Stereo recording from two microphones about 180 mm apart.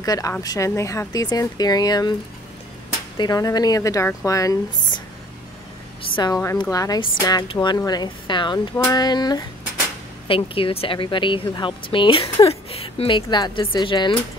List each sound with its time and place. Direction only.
0.0 s speech: 20° left (ahead or behind)
3.2 s speech: 20° left (ahead or behind)
6.1 s speech: 20° left (ahead or behind)